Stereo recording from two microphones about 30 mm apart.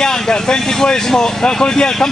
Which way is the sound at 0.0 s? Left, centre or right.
Left.